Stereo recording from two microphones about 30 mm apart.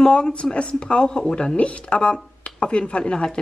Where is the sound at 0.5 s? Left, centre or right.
Left.